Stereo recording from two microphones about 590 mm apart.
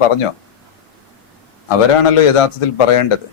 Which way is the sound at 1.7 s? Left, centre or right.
Left.